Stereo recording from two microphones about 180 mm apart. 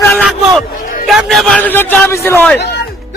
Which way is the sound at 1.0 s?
Centre (ahead or behind).